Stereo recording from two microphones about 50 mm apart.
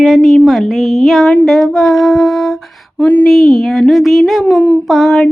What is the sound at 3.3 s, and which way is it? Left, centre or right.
Speech, centre.